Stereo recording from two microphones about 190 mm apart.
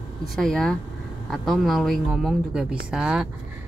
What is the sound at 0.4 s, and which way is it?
A woman's voice, centre (ahead or behind).